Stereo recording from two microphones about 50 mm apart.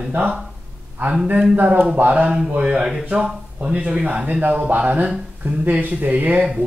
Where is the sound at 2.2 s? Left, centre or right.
Centre.